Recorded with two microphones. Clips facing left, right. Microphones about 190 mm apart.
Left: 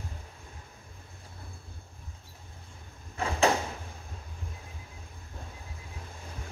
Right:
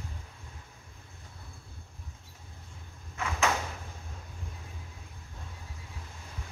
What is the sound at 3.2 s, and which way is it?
Door, 30° left (ahead or behind).